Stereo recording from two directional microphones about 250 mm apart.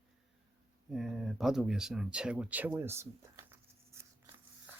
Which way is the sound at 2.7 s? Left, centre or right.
Centre.